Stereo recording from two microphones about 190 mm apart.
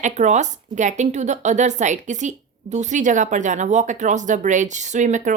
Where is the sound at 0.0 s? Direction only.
40° right (ahead or behind).